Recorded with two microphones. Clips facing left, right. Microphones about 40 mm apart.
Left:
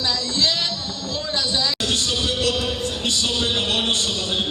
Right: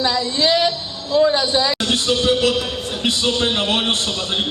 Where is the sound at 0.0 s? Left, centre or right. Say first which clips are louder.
Right 4 dB; centre.